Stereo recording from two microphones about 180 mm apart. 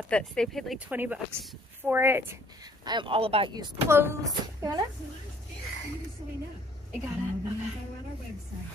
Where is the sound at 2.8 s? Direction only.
25° right (ahead or behind).